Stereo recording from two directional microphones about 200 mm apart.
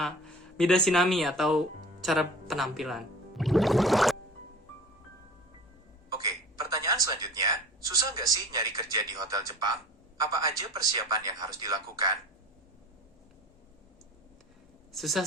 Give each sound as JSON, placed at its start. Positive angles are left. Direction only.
{"t": 0.5, "sound": "speech", "side_deg": 5}
{"t": 6.1, "sound": "a sound", "side_deg": -20}
{"t": 10.2, "sound": "a man's voice", "side_deg": -20}
{"t": 14.9, "sound": "speech", "side_deg": 0}